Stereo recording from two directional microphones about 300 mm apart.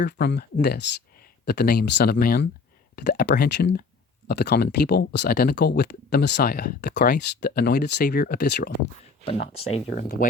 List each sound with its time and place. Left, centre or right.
0.0 s speech: left
9.7 s speech: left